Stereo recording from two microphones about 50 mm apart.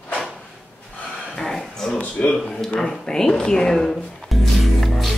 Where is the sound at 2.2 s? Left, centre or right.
Centre.